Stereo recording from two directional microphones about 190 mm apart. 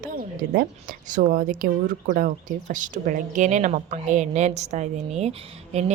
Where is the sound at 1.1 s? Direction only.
45° right (ahead or behind).